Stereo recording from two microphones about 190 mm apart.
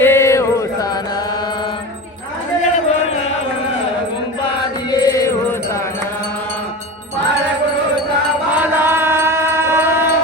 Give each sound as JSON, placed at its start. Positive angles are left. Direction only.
{"t": 0.0, "sound": "chant", "side_deg": 15}
{"t": 4.9, "sound": "music", "side_deg": 20}
{"t": 8.5, "sound": "chant", "side_deg": -10}